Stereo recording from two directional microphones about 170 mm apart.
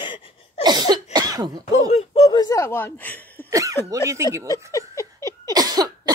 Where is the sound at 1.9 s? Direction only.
35° left (ahead or behind).